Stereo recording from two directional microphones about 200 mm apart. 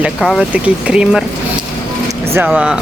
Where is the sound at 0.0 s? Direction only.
Centre (ahead or behind).